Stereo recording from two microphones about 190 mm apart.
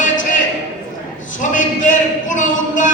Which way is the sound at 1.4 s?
40° left (ahead or behind).